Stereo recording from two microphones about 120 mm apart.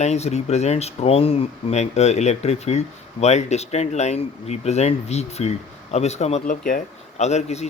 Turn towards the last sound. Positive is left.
turn(degrees=65)  # may be behind; listen again after turning